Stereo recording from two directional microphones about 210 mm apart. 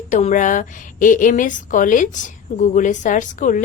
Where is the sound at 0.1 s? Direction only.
35° left (ahead or behind).